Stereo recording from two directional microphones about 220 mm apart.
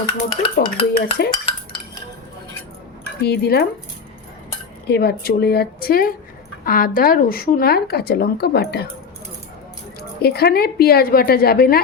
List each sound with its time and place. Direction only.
0.5 s speech: 45° left (ahead or behind)
1.5 s cutlery: 20° left (ahead or behind)
3.2 s speech: 45° left (ahead or behind)
4.9 s speech: 45° left (ahead or behind)
10.2 s speech: 45° left (ahead or behind)